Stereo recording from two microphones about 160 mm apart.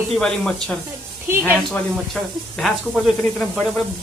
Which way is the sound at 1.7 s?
Centre (ahead or behind).